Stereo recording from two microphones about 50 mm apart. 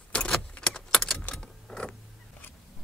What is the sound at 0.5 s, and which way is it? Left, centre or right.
Keys jangling, centre.